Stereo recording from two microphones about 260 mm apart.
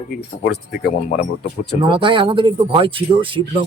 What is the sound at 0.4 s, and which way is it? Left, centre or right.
Speech, left.